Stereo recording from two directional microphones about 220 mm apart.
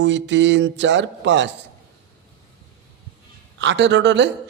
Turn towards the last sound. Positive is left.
turn(degrees=-55)  # may be behind; listen again after turning